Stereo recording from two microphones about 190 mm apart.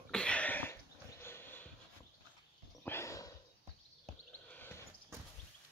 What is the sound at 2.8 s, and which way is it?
Horse, 15° left (ahead or behind).